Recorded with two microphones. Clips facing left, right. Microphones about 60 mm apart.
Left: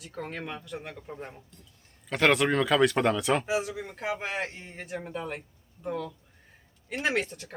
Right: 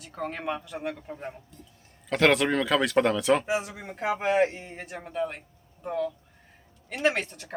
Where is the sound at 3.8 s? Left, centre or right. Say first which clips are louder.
Right 4 dB; right.